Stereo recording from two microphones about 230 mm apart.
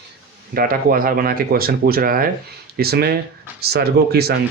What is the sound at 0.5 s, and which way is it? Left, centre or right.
Speech, right.